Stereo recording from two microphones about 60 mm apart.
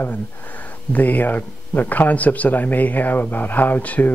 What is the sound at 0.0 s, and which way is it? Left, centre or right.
Speech, left.